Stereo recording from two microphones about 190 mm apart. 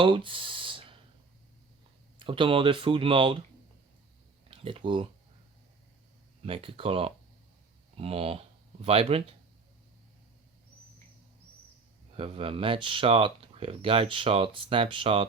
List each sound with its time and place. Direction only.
0.0 s a sound: 25° right (ahead or behind)
2.1 s speech: 25° right (ahead or behind)
4.4 s speech: 30° right (ahead or behind)
6.4 s speech: 30° right (ahead or behind)
12.1 s speech: 30° right (ahead or behind)